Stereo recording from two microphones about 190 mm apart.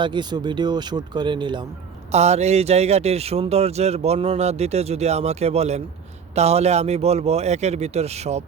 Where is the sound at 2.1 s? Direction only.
35° right (ahead or behind).